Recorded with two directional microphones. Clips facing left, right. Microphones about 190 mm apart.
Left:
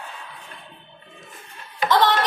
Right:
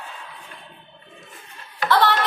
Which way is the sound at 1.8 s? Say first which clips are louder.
Even; 20° left (ahead or behind).